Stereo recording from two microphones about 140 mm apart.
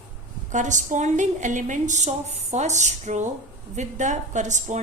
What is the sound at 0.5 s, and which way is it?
A woman's voice, 60° right (ahead or behind).